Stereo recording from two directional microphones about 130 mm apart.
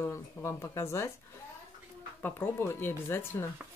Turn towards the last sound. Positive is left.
turn(degrees=20)  # may be behind; listen again after turning